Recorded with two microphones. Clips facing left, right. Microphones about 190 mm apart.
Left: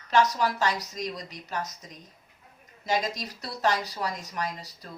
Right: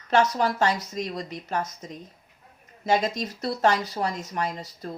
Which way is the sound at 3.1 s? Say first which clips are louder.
Right 8 dB; 50° right (ahead or behind).